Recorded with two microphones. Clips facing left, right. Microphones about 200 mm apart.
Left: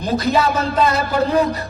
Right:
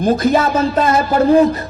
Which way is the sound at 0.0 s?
50° right (ahead or behind).